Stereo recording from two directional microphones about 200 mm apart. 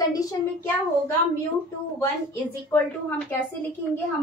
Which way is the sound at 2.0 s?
10° left (ahead or behind).